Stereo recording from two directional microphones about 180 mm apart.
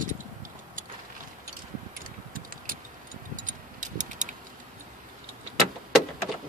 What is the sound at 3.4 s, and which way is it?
Vehicle, 45° right (ahead or behind).